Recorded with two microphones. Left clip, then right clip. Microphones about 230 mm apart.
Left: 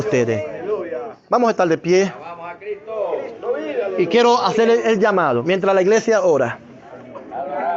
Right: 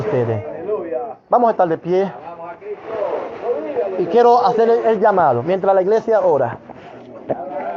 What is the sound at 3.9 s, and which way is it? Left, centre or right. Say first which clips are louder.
A man's voice: right 2 dB; left.